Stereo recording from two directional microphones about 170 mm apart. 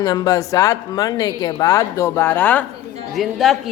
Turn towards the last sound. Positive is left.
turn(degrees=0)  # may be behind; listen again after turning